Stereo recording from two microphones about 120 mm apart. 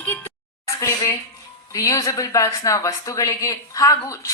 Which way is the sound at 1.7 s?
30° left (ahead or behind).